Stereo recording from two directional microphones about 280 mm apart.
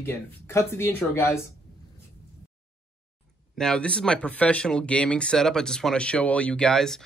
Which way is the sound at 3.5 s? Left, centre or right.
Centre.